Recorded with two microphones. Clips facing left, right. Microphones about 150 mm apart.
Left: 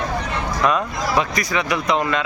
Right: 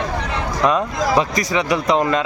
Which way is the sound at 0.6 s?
30° right (ahead or behind).